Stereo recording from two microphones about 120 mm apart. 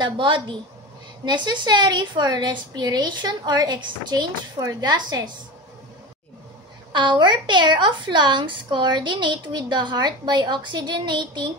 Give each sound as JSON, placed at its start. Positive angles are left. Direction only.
{"t": 0.0, "sound": "a woman's voice", "side_deg": -40}
{"t": 6.9, "sound": "a woman's voice", "side_deg": -40}